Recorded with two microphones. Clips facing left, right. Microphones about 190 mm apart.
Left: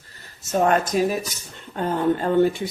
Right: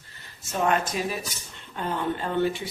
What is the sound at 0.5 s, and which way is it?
Speech, 45° left (ahead or behind).